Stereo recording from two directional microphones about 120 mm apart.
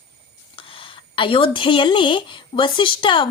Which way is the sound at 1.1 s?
45° left (ahead or behind).